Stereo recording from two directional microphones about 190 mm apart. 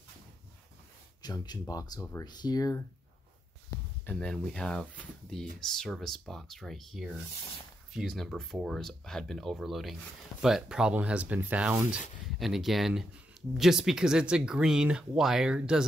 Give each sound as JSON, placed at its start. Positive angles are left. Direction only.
{"t": 1.2, "sound": "speech", "side_deg": 20}
{"t": 4.0, "sound": "speech", "side_deg": 5}